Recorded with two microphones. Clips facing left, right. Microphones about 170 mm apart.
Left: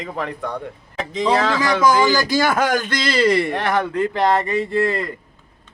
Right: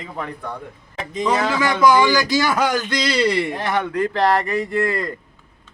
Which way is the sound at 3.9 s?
20° left (ahead or behind).